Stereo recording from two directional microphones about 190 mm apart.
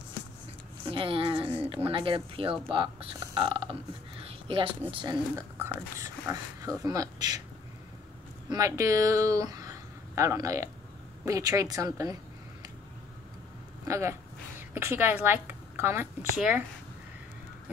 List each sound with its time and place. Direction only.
0.8 s a sound: 30° right (ahead or behind)
1.9 s a woman's voice: 25° right (ahead or behind)
5.3 s speech: 15° right (ahead or behind)
8.5 s speech: 15° right (ahead or behind)
13.8 s a woman's voice: 15° right (ahead or behind)